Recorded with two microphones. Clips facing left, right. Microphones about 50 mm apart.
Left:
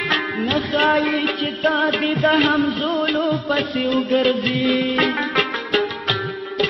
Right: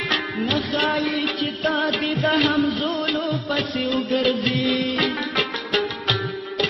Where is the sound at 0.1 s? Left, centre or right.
Centre.